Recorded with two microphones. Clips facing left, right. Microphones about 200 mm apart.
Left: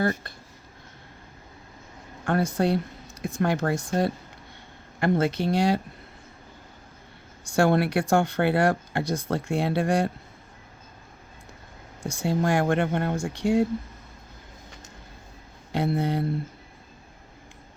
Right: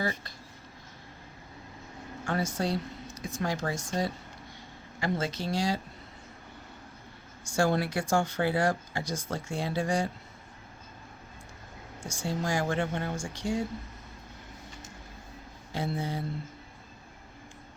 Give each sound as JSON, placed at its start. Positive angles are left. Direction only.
{"t": 0.0, "sound": "speech", "side_deg": 55}
{"t": 2.2, "sound": "speech", "side_deg": 60}
{"t": 7.4, "sound": "speech", "side_deg": 60}
{"t": 12.0, "sound": "speech", "side_deg": 60}
{"t": 15.7, "sound": "speech", "side_deg": 60}